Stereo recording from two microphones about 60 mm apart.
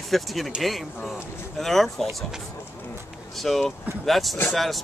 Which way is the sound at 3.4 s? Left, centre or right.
Centre.